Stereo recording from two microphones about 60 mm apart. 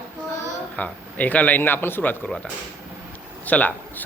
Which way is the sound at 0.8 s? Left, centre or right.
Left.